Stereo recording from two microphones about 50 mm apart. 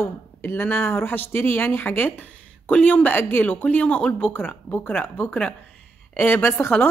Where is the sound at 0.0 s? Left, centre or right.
Left.